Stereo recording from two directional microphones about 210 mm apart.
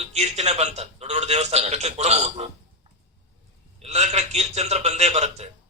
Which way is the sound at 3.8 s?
30° right (ahead or behind).